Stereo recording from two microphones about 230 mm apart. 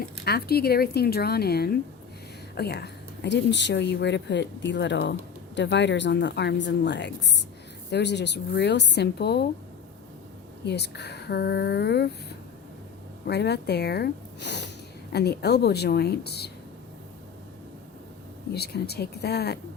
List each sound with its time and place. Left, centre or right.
0.0 s speech: left
10.7 s speech: left
13.2 s speech: left
18.5 s speech: left